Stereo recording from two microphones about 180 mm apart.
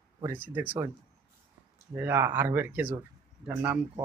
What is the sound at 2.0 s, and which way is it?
Speech, 10° right (ahead or behind).